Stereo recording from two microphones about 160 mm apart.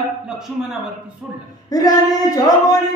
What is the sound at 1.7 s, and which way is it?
A man's voice, 25° left (ahead or behind).